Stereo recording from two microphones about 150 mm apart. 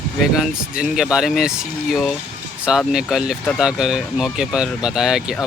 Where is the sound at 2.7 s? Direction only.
5° right (ahead or behind).